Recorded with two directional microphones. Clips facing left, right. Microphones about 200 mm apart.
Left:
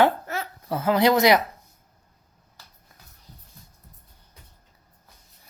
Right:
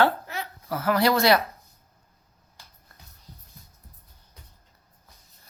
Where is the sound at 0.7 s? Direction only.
20° left (ahead or behind).